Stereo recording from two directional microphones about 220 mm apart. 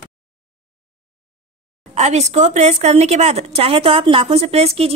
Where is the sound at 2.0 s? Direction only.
30° right (ahead or behind).